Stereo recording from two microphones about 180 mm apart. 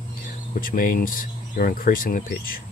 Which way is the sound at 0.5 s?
50° left (ahead or behind).